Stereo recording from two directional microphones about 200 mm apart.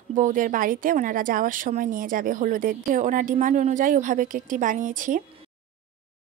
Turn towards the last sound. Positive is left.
turn(degrees=-40)  # may be behind; listen again after turning